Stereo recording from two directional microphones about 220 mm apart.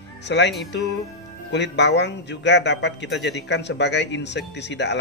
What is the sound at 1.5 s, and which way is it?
A man's voice, 50° left (ahead or behind).